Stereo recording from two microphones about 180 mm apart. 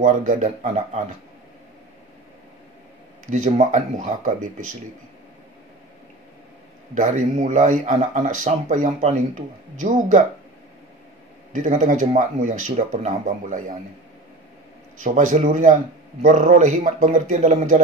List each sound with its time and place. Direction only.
0.0 s speech: 45° right (ahead or behind)
3.3 s speech: 40° right (ahead or behind)
7.0 s speech: 45° right (ahead or behind)
11.5 s speech: 45° right (ahead or behind)
15.0 s speech: 45° right (ahead or behind)